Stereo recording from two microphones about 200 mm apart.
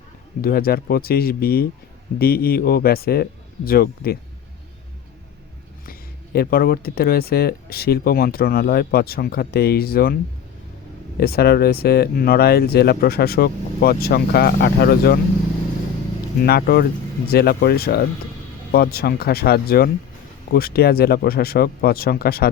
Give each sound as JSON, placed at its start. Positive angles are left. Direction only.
{"t": 0.4, "sound": "speech", "side_deg": 50}
{"t": 5.8, "sound": "speech", "side_deg": 50}
{"t": 11.2, "sound": "speech", "side_deg": 50}
{"t": 16.5, "sound": "speech", "side_deg": 50}